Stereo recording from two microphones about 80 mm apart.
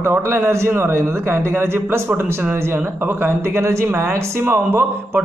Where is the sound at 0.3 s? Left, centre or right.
Right.